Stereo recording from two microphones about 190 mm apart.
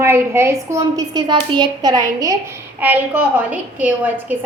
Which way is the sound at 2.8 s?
10° right (ahead or behind).